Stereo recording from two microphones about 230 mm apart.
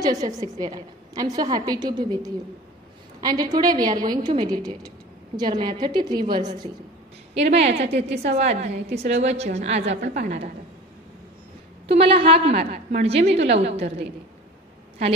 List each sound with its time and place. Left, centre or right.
0.0 s a woman's voice: centre
7.3 s a woman's voice: right
11.9 s a woman's voice: right